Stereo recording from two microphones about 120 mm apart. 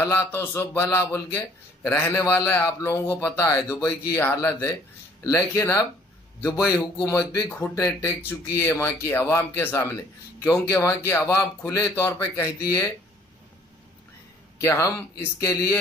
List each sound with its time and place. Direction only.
0.3 s speech: 20° left (ahead or behind)
5.2 s speech: 25° left (ahead or behind)
7.4 s speech: 20° left (ahead or behind)
14.6 s speech: 25° left (ahead or behind)